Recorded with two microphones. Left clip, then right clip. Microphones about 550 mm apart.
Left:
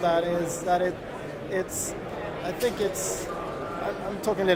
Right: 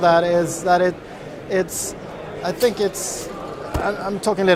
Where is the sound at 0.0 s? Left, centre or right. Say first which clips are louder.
Right 9 dB; right.